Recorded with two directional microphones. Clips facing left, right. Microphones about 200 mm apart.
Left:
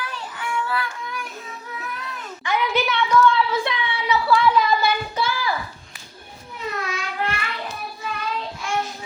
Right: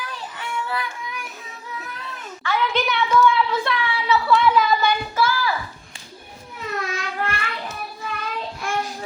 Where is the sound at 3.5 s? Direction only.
20° left (ahead or behind).